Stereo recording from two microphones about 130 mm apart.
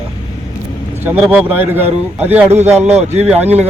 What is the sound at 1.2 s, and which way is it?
Speech, 10° right (ahead or behind).